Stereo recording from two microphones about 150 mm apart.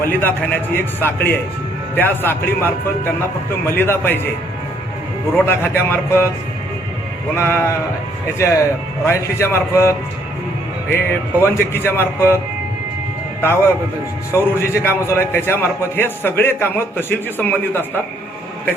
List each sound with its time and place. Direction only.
0.0 s a man's voice: 15° left (ahead or behind)
5.5 s a man's voice: 15° left (ahead or behind)
7.3 s a man's voice: 15° left (ahead or behind)
10.9 s a man's voice: 15° left (ahead or behind)
14.3 s a man's voice: 15° left (ahead or behind)